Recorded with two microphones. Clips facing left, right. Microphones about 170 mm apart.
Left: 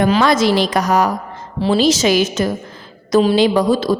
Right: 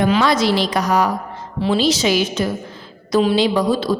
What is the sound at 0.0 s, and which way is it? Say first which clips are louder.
A woman's voice: left 2 dB; 50° left (ahead or behind).